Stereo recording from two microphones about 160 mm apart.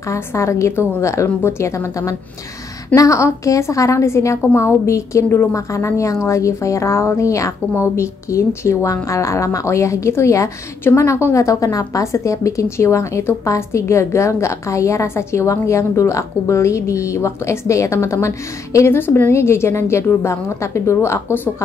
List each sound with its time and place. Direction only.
0.1 s a woman's voice: 20° left (ahead or behind)